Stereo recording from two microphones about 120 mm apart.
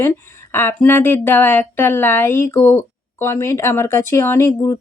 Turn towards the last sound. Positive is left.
turn(degrees=25)  # may be behind; listen again after turning